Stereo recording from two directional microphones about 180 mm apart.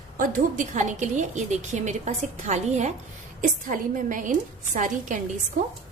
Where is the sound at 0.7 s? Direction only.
45° right (ahead or behind).